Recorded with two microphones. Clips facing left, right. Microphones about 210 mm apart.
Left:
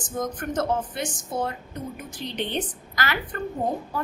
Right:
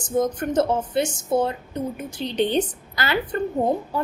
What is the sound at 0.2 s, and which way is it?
Speech, 25° right (ahead or behind).